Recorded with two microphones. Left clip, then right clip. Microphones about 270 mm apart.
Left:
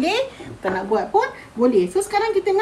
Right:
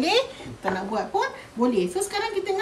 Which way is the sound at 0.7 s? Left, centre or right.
Centre.